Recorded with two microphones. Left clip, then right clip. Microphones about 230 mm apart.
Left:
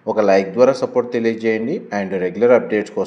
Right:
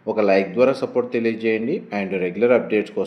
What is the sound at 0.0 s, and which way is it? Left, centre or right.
A man's voice, left.